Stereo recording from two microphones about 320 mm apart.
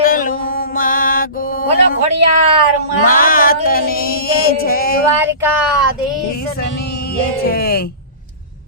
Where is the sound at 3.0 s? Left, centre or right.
Left.